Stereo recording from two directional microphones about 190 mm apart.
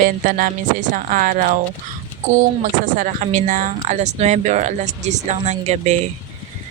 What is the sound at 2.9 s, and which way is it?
Speech, 40° right (ahead or behind).